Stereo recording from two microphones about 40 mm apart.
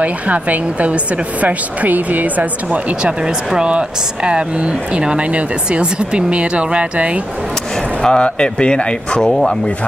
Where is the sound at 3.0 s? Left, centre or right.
Right.